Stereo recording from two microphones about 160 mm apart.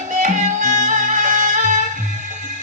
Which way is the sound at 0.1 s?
50° right (ahead or behind).